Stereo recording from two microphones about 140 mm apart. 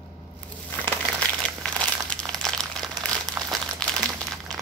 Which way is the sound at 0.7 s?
10° left (ahead or behind).